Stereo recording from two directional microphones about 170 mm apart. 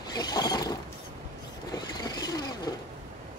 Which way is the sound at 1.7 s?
20° left (ahead or behind).